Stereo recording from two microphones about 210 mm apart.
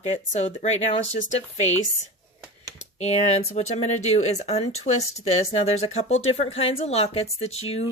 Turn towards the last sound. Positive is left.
turn(degrees=30)  # may be behind; listen again after turning